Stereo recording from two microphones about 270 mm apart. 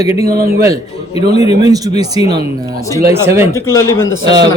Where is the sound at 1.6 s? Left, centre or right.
Centre.